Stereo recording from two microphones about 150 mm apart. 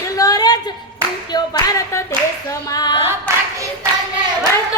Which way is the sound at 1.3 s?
25° left (ahead or behind).